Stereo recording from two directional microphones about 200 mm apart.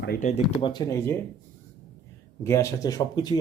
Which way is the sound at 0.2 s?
30° left (ahead or behind).